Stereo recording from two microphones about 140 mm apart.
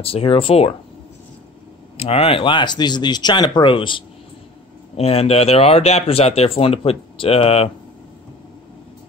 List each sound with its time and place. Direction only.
0.0 s speech: 45° left (ahead or behind)
2.0 s speech: 45° left (ahead or behind)
4.9 s speech: 50° left (ahead or behind)